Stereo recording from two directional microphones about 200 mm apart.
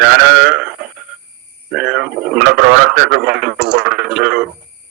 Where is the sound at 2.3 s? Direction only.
50° right (ahead or behind).